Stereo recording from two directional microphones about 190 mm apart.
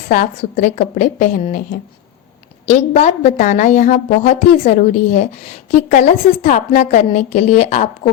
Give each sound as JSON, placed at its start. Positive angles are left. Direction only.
{"t": 0.1, "sound": "a woman's voice", "side_deg": 45}
{"t": 2.6, "sound": "a woman's voice", "side_deg": 40}